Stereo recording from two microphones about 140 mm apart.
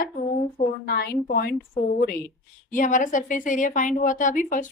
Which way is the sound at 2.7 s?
70° left (ahead or behind).